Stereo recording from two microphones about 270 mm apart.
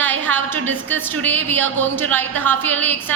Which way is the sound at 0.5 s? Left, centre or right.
Right.